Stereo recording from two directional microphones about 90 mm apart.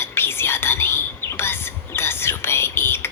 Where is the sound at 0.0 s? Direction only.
25° left (ahead or behind).